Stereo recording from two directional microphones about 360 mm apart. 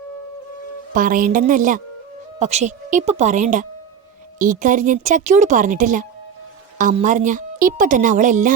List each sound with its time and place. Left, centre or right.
0.9 s speech: right